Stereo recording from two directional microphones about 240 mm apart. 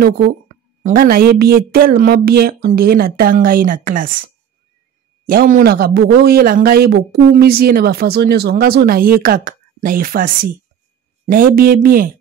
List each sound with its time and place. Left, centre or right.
0.8 s a man's voice: right
5.2 s a man's voice: right